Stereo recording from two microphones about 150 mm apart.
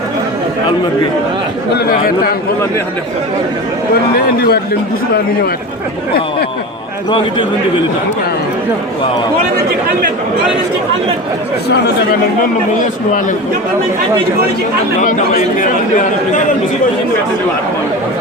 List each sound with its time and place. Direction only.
1.7 s speech: 90° left
4.4 s speech: 90° left
15.0 s speech: 60° left (ahead or behind)